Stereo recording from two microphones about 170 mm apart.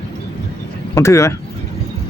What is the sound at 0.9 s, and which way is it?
Speech, 15° left (ahead or behind).